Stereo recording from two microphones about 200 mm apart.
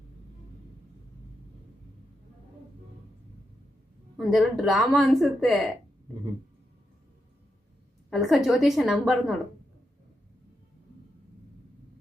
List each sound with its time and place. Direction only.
4.2 s a woman's voice: centre (ahead or behind)
8.1 s a woman's voice: centre (ahead or behind)